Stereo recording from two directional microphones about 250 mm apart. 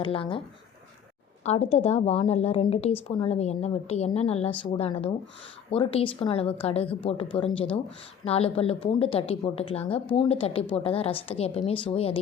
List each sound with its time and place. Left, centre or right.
0.0 s a woman's voice: left
1.5 s a woman's voice: left